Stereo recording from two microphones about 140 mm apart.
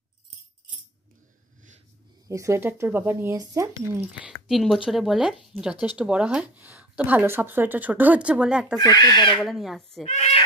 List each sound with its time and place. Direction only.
2.2 s speech: 20° right (ahead or behind)
4.5 s speech: centre (ahead or behind)
8.7 s speech: 30° left (ahead or behind)
9.4 s speech: centre (ahead or behind)
10.0 s a sound: 55° left (ahead or behind)